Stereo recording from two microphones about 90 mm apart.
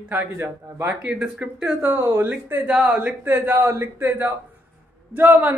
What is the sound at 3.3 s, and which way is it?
Speech, 25° right (ahead or behind).